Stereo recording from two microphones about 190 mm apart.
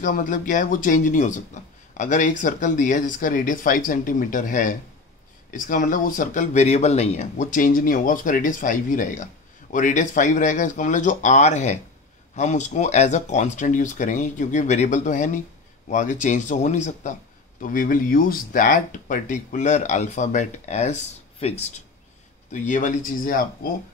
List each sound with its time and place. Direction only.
0.0 s a man's voice: 45° left (ahead or behind)